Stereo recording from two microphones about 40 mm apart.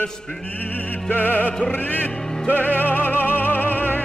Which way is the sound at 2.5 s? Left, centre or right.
Left.